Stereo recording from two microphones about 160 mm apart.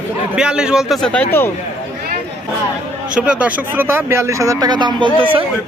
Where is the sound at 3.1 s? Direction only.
5° right (ahead or behind); by 5.1 s 30° right (ahead or behind).